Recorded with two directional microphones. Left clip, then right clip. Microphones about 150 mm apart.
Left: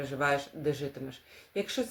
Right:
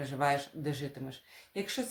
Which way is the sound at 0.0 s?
20° right (ahead or behind).